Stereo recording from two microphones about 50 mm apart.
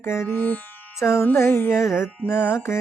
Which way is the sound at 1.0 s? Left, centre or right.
Left.